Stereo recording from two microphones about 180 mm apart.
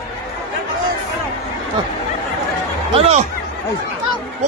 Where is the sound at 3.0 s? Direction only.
35° right (ahead or behind).